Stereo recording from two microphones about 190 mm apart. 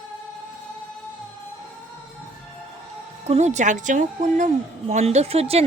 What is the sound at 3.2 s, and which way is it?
Speech, 35° right (ahead or behind).